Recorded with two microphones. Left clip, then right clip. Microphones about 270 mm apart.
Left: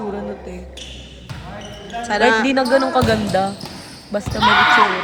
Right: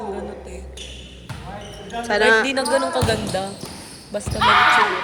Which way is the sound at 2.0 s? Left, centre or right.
Centre.